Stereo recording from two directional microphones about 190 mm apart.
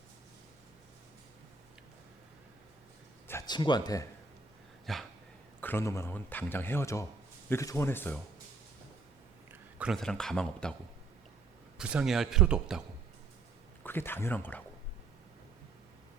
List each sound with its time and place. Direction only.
3.2 s speech: 20° left (ahead or behind)
4.9 s dog: centre (ahead or behind)
5.5 s a man's voice: 10° left (ahead or behind)
9.5 s a man's voice: 5° right (ahead or behind)
11.8 s a man's voice: 5° right (ahead or behind)
13.8 s a man's voice: 10° left (ahead or behind)